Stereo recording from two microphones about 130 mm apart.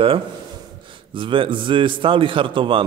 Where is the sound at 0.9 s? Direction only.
40° right (ahead or behind).